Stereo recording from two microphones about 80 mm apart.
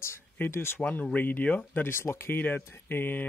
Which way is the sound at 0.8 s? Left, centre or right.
Centre.